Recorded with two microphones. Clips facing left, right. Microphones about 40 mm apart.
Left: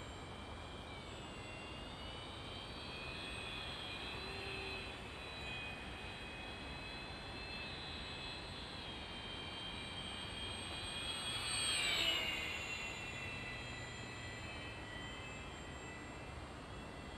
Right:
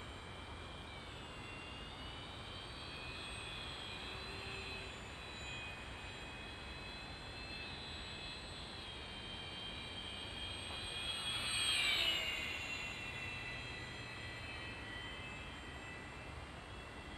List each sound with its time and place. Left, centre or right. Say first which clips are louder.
11.0 s vehicle: right 2 dB; centre
11.3 s jet engine: right 3 dB; right
12.0 s a sound: even; centre